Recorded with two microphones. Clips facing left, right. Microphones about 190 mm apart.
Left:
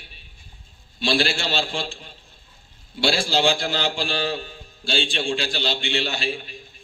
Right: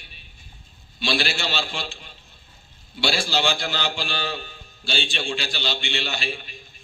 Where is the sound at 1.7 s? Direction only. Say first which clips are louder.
Left 4 dB; 40° left (ahead or behind).